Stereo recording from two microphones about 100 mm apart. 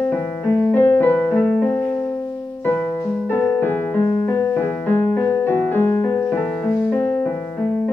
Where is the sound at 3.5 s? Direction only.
20° left (ahead or behind).